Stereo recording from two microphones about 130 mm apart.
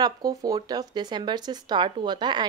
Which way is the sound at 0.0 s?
30° right (ahead or behind).